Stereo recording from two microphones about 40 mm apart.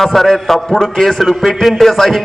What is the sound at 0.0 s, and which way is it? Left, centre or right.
A man's voice, centre.